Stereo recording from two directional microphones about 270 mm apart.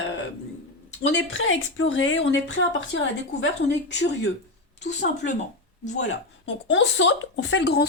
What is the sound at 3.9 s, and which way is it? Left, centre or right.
Speech, left.